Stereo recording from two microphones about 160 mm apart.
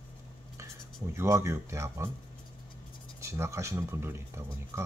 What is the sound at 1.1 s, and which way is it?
Speech, 20° right (ahead or behind).